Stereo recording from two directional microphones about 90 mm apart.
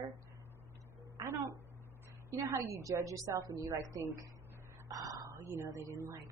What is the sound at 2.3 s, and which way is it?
Speech, 35° right (ahead or behind).